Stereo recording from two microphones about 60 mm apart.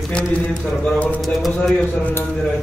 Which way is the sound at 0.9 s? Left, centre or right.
Left.